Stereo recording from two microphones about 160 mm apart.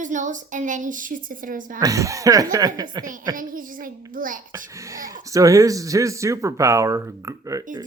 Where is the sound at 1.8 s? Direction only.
20° right (ahead or behind).